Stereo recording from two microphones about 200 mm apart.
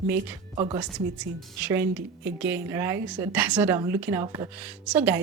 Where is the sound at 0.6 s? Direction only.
20° right (ahead or behind).